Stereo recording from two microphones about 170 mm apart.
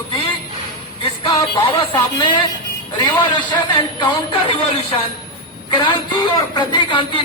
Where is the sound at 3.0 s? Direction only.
25° left (ahead or behind).